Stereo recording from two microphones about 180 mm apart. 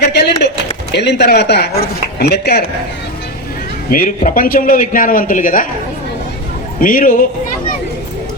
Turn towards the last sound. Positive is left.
turn(degrees=50)  # may be behind; listen again after turning